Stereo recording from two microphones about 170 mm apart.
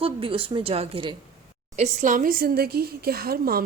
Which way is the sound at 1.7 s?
45° right (ahead or behind).